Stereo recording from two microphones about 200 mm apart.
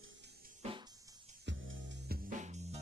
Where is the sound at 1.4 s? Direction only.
65° right (ahead or behind).